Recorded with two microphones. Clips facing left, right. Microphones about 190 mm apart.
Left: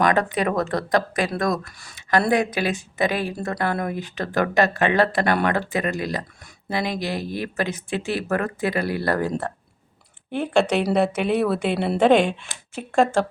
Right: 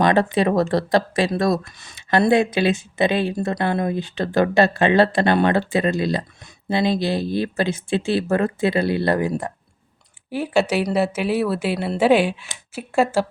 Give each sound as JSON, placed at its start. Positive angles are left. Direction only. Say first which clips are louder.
{"t": 0.0, "sound": "speech", "louder": "right 3 dB", "side_deg": -25}
{"t": 10.3, "sound": "speech", "louder": "even", "side_deg": -5}